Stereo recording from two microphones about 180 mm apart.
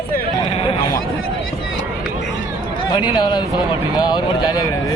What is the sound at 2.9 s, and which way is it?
Speech, 25° left (ahead or behind).